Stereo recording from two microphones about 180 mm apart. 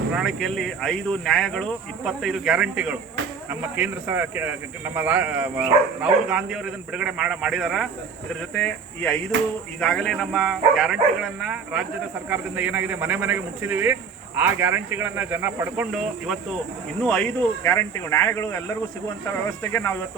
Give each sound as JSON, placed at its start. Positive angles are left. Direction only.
{"t": 0.1, "sound": "speech", "side_deg": 0}
{"t": 8.3, "sound": "speech", "side_deg": 10}
{"t": 19.7, "sound": "speech", "side_deg": 15}